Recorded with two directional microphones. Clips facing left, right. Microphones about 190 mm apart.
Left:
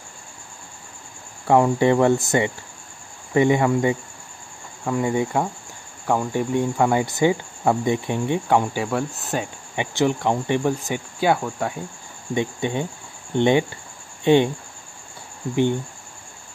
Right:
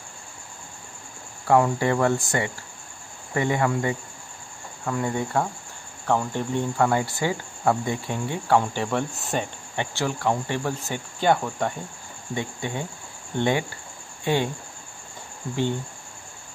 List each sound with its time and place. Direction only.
1.5 s speech: 20° left (ahead or behind)
3.3 s cricket: 20° left (ahead or behind)
8.8 s speech: centre (ahead or behind)
9.8 s cricket: 20° left (ahead or behind); by 11.7 s 5° left (ahead or behind)
12.4 s speech: 20° left (ahead or behind)